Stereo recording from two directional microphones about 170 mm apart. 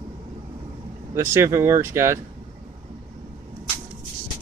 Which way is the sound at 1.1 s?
15° right (ahead or behind).